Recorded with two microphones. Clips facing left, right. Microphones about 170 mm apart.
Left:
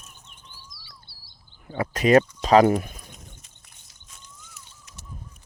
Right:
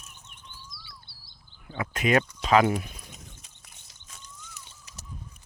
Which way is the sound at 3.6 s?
Centre (ahead or behind).